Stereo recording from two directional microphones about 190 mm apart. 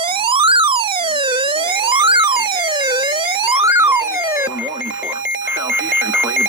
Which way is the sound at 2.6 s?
25° right (ahead or behind).